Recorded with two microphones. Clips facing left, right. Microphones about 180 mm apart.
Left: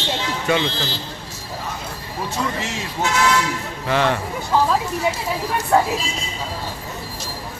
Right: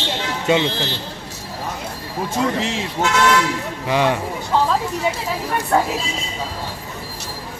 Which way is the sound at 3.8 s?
15° right (ahead or behind).